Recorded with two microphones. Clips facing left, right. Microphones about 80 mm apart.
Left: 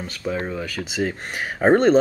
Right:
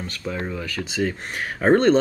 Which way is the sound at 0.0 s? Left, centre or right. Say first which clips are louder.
Left 2 dB; centre.